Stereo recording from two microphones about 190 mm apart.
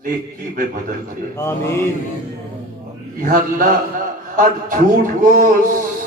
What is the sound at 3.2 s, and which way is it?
A man's voice, 45° right (ahead or behind).